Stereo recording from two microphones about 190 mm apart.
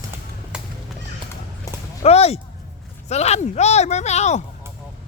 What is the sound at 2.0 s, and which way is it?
Speech, 35° left (ahead or behind).